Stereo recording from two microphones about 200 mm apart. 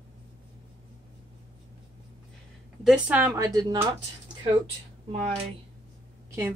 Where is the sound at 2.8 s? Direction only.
5° right (ahead or behind).